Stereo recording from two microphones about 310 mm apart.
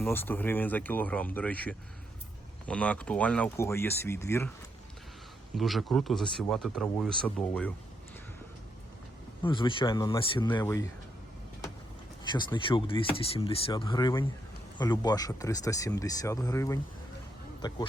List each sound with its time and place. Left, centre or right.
0.0 s speech: centre
5.5 s speech: centre
9.4 s speech: centre
12.2 s speech: centre